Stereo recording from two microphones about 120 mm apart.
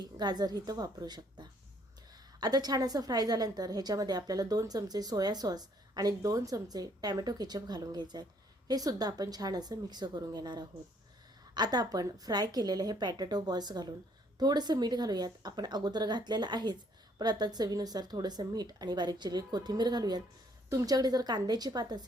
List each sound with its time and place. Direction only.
0.0 s a woman's voice: 35° right (ahead or behind)